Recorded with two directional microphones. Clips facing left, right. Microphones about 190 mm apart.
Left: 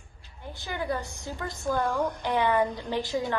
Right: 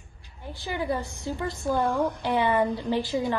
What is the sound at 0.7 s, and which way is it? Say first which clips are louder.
Speech: right 2 dB; 15° right (ahead or behind).